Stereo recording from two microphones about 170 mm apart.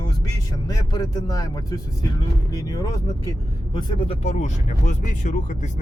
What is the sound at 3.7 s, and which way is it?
Speech, 35° left (ahead or behind).